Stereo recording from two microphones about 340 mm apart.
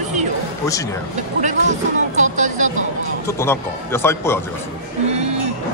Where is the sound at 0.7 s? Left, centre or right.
Centre.